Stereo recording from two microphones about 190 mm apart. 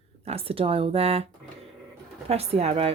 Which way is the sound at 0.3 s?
30° right (ahead or behind).